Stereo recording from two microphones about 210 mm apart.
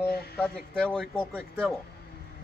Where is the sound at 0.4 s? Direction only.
5° left (ahead or behind).